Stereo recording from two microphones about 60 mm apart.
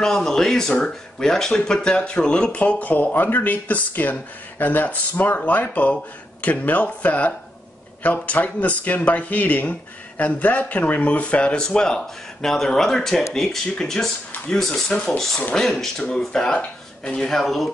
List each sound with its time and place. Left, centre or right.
0.0 s speech: centre